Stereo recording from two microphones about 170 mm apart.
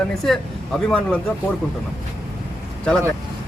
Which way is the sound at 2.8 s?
5° left (ahead or behind).